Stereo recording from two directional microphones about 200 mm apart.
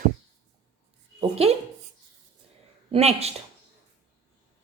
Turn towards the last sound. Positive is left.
turn(degrees=-30)  # may be behind; listen again after turning